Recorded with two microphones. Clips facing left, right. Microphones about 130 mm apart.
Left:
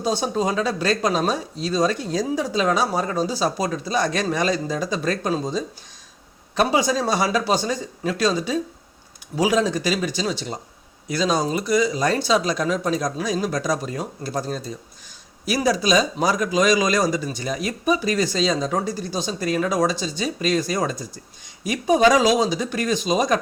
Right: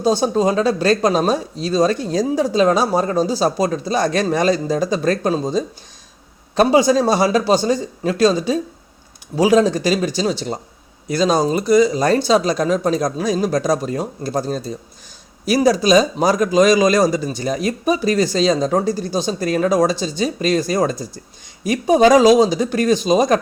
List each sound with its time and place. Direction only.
0.0 s speech: 35° right (ahead or behind)